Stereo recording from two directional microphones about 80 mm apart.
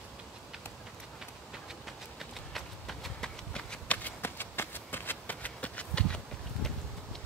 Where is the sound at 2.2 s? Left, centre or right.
Centre.